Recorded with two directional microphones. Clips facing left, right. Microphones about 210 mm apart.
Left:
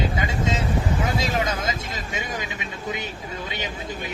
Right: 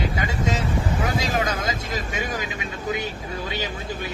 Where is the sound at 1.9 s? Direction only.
25° left (ahead or behind).